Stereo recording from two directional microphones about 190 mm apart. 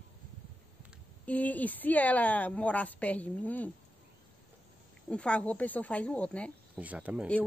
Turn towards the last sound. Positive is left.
turn(degrees=-5)  # may be behind; listen again after turning